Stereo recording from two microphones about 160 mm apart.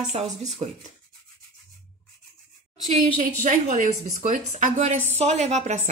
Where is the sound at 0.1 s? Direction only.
40° right (ahead or behind).